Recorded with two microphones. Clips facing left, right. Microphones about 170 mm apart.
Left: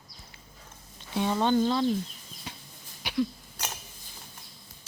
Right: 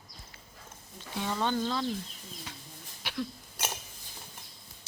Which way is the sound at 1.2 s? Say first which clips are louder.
Left 6 dB; 25° left (ahead or behind).